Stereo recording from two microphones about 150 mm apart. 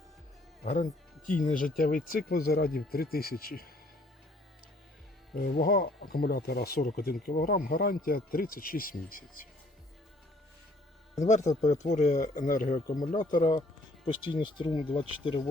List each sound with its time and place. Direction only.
0.6 s speech: 60° left (ahead or behind); by 3.7 s 75° left (ahead or behind)
5.4 s speech: 80° left
11.2 s speech: 50° left (ahead or behind)
13.5 s speech: 35° left (ahead or behind)